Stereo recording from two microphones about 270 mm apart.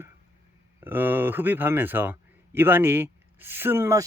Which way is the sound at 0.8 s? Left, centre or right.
Centre.